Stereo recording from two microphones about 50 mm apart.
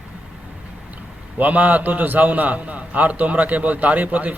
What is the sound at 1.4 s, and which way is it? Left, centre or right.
A man's voice, right.